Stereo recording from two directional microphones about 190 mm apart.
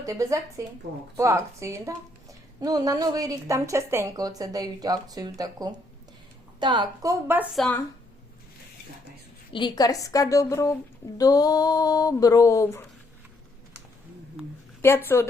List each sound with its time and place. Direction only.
0.0 s a woman's voice: 15° right (ahead or behind)
7.5 s speech: centre (ahead or behind)
9.5 s a woman's voice: 25° left (ahead or behind)
14.8 s a woman's voice: 10° left (ahead or behind)